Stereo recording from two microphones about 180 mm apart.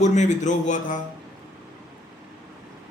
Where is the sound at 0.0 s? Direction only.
40° left (ahead or behind).